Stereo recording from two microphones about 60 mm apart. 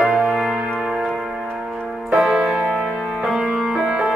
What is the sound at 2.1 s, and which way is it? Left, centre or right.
Keyboard, centre.